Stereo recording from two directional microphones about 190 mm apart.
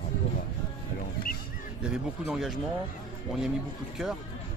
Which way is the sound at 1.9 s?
5° right (ahead or behind).